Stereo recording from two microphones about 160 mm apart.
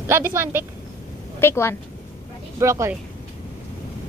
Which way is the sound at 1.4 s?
15° left (ahead or behind).